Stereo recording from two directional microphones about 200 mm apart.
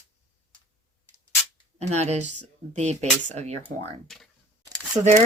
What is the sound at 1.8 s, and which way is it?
Speech, 35° right (ahead or behind).